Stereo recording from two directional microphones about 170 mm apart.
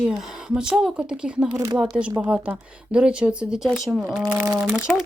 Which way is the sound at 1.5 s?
20° right (ahead or behind).